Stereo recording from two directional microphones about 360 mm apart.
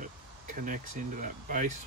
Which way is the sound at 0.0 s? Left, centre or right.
Right.